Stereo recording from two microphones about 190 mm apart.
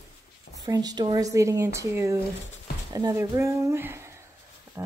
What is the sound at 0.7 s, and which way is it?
Speech, 20° right (ahead or behind).